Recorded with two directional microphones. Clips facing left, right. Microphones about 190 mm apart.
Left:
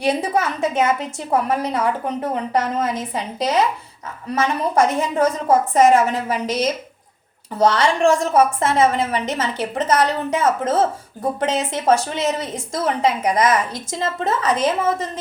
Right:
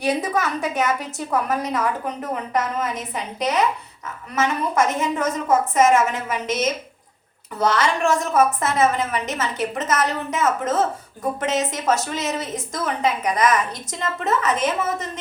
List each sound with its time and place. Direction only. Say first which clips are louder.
0.0 s a woman's voice: left 2 dB; 30° left (ahead or behind)